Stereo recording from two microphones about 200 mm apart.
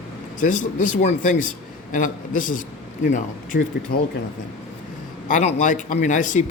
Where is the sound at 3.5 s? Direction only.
55° left (ahead or behind).